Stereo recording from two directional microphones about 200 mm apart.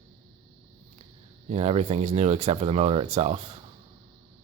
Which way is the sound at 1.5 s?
30° right (ahead or behind).